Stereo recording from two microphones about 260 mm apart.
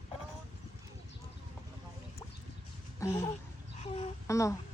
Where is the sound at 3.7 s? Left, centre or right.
Left.